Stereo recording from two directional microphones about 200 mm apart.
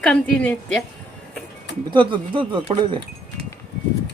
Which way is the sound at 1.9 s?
25° right (ahead or behind).